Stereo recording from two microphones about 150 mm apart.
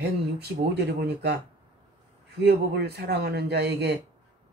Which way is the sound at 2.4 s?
90° right.